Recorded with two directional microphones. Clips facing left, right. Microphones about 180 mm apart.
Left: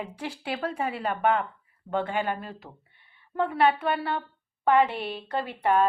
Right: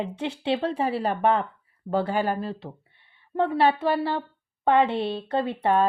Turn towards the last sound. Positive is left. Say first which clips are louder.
# right 2 dB
turn(degrees=-25)  # may be behind; listen again after turning